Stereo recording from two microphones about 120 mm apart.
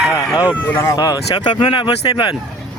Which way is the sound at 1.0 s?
30° left (ahead or behind).